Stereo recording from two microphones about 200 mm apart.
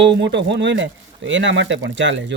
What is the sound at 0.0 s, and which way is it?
Speech, 60° right (ahead or behind).